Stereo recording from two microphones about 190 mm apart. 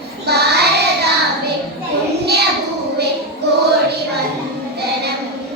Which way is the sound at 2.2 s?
60° right (ahead or behind).